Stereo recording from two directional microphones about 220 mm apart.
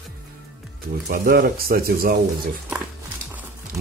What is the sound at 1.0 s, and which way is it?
Speech, 40° right (ahead or behind).